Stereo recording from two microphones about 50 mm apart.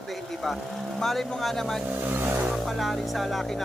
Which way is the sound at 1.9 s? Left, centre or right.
Right.